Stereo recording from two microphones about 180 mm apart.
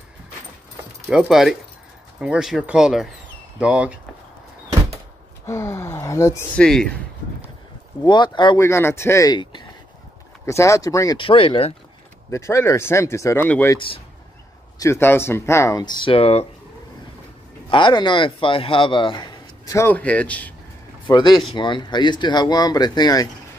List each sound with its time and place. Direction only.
1.1 s speech: centre (ahead or behind)
5.5 s a sound: 15° left (ahead or behind)
6.6 s speech: 5° left (ahead or behind)
8.0 s a man's voice: 25° left (ahead or behind)
12.3 s speech: 15° left (ahead or behind)
13.7 s a man's voice: 30° left (ahead or behind)
14.8 s speech: 15° left (ahead or behind); by 16.4 s 35° left (ahead or behind)
17.6 s a man's voice: 25° left (ahead or behind); by 20.5 s 10° left (ahead or behind)
21.1 s a man's voice: 25° left (ahead or behind)